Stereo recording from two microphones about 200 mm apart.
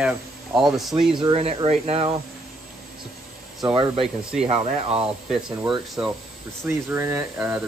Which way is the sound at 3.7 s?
25° right (ahead or behind).